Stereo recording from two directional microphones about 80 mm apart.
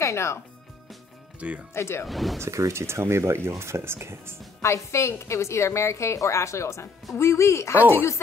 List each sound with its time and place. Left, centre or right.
0.0 s speech: left
1.7 s a woman's voice: left
2.0 s speech: centre
2.4 s speech: right
4.6 s a woman's voice: left